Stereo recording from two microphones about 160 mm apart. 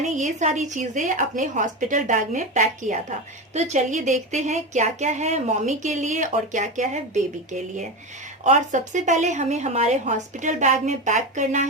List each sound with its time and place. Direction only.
0.0 s speech: 50° right (ahead or behind)